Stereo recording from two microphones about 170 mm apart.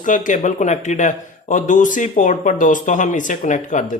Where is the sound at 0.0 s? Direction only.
50° left (ahead or behind).